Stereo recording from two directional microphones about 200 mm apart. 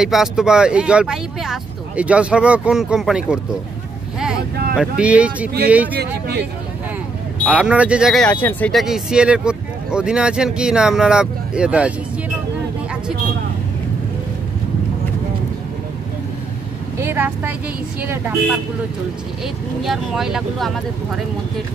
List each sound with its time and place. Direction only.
0.0 s speech: centre (ahead or behind)
4.7 s speech: 5° right (ahead or behind)
5.9 s speech: 55° right (ahead or behind)
7.4 s speech: 5° right (ahead or behind)
17.0 s vehicle: 10° right (ahead or behind)
19.4 s speech: centre (ahead or behind)